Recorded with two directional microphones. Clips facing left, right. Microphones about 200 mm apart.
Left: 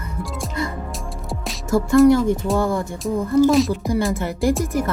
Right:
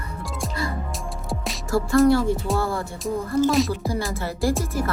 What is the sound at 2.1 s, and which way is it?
Speech, 20° left (ahead or behind).